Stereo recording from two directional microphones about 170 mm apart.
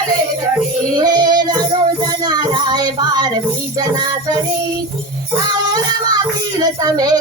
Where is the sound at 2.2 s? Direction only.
25° right (ahead or behind).